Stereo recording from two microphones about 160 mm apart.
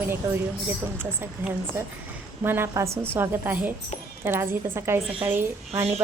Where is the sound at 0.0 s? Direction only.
15° right (ahead or behind).